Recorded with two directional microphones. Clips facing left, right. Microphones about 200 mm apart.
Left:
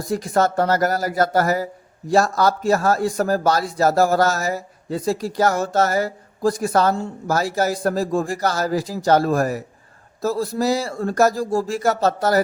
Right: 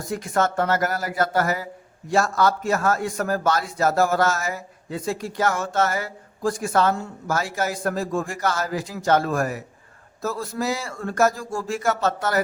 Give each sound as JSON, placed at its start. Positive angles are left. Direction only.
{"t": 0.0, "sound": "a man's voice", "side_deg": 35}